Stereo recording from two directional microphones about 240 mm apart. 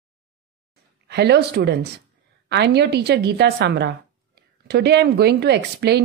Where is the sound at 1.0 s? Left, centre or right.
Right.